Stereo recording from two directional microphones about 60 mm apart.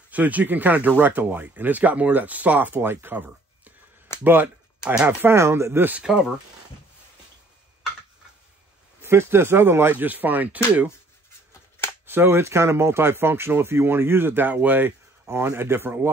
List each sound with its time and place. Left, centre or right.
0.1 s speech: right
4.2 s a sound: right
5.2 s speech: right
5.9 s speech: centre
9.0 s speech: right
9.9 s speech: right
12.1 s speech: right
15.3 s speech: right